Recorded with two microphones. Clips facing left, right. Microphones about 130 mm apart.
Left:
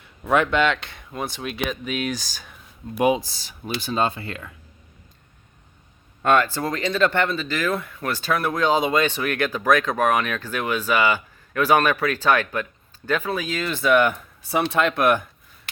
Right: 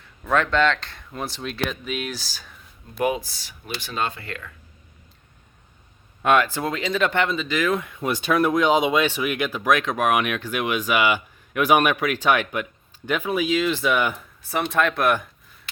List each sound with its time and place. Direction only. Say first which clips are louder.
0.3 s speech: left 1 dB; 10° left (ahead or behind)
3.9 s speech: left 4 dB; 30° left (ahead or behind)
6.2 s speech: even; 10° right (ahead or behind)